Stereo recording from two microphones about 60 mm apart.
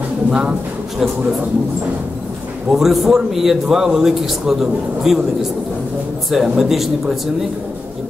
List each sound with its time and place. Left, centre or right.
0.3 s speech: centre
2.7 s a man's voice: centre
6.3 s a man's voice: centre